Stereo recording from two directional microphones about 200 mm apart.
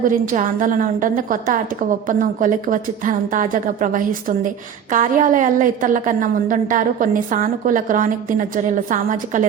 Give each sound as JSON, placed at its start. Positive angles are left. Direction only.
{"t": 0.0, "sound": "a woman's voice", "side_deg": -40}